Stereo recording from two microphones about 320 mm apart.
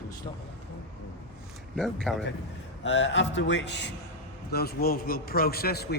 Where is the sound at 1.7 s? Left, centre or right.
Centre.